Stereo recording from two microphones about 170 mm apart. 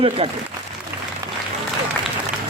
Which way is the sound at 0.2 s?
35° right (ahead or behind).